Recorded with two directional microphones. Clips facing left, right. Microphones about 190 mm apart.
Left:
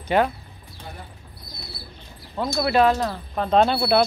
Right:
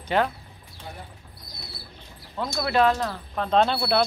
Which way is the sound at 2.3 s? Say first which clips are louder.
Left 4 dB; 25° left (ahead or behind).